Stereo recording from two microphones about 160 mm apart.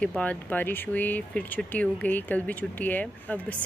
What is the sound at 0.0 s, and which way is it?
Speech, 5° left (ahead or behind).